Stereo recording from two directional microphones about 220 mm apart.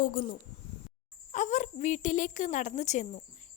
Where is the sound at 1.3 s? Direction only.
35° left (ahead or behind).